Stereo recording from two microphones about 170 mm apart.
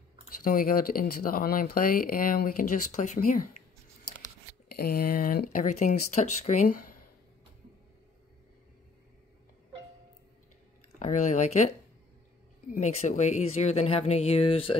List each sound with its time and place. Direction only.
0.4 s speech: 55° left (ahead or behind)
4.7 s speech: 60° left (ahead or behind); by 6.7 s 45° left (ahead or behind)
11.0 s speech: 45° left (ahead or behind)
12.7 s speech: 45° left (ahead or behind)